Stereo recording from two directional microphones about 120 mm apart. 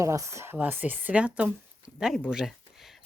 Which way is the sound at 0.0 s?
25° right (ahead or behind).